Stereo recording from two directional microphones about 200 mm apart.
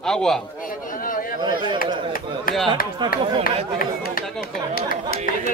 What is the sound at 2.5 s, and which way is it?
Speech, 45° left (ahead or behind).